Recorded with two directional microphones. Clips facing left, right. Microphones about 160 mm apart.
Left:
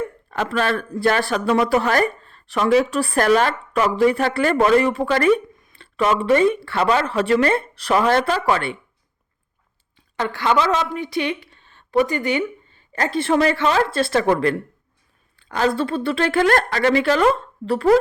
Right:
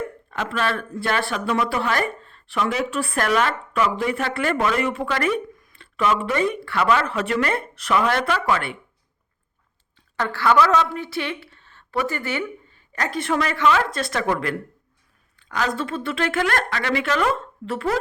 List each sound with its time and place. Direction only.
0.3 s speech: 40° left (ahead or behind)
10.2 s a woman's voice: 20° left (ahead or behind); by 17.9 s 35° left (ahead or behind)